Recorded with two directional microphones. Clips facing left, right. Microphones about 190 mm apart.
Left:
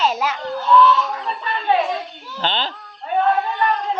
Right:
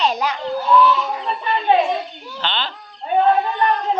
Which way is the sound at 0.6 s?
10° right (ahead or behind).